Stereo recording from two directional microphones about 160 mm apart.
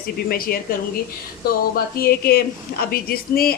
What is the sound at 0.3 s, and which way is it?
Speech, 65° left (ahead or behind).